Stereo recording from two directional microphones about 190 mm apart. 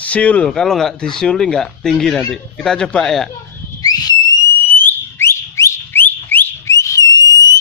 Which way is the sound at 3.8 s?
20° left (ahead or behind).